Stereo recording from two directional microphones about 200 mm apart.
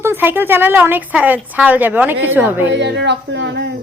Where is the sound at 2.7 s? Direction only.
60° right (ahead or behind).